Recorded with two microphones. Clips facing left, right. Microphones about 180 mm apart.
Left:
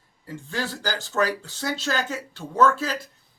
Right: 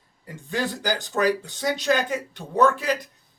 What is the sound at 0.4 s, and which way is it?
Speech, 15° right (ahead or behind).